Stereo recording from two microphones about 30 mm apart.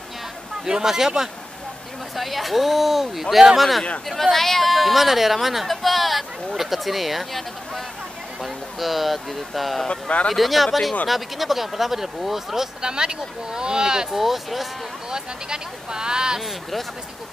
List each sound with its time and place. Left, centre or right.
0.7 s speech: centre
2.1 s speech: centre
9.8 s speech: left
10.3 s speech: centre
12.8 s speech: right
14.1 s speech: centre
15.0 s speech: right